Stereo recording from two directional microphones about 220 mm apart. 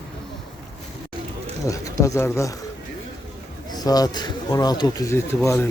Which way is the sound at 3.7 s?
15° left (ahead or behind).